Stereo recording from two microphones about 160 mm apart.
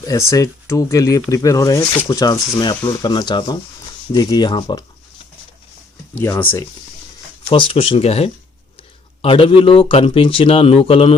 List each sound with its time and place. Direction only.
0.0 s speech: 20° left (ahead or behind)
6.1 s speech: 15° left (ahead or behind)
7.5 s a man's voice: 35° left (ahead or behind)